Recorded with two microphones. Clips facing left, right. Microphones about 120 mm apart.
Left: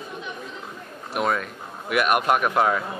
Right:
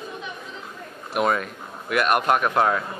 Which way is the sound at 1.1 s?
Centre (ahead or behind).